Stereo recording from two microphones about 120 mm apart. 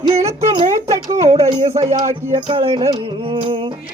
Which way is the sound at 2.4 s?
50° right (ahead or behind).